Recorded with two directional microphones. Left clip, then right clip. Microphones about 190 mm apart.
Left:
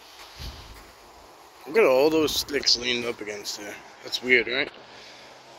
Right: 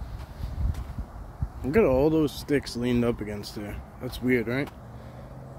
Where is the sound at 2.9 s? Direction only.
20° right (ahead or behind).